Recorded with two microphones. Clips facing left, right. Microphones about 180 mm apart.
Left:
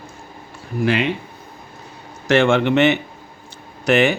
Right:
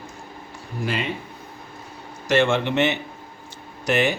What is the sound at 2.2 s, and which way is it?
A man's voice, 65° left (ahead or behind).